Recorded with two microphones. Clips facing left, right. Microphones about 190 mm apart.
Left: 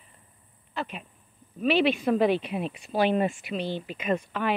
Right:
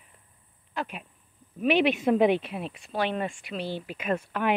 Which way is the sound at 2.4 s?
Centre (ahead or behind).